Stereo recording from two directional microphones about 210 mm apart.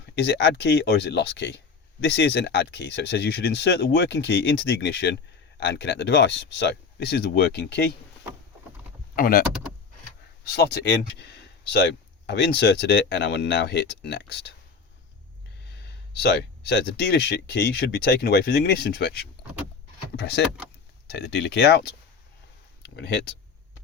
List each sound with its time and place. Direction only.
0.0 s speech: 55° left (ahead or behind)
9.1 s speech: 45° left (ahead or behind)
10.4 s speech: 50° left (ahead or behind)
16.2 s speech: 50° left (ahead or behind)
21.1 s speech: 55° left (ahead or behind)
23.0 s speech: 55° left (ahead or behind)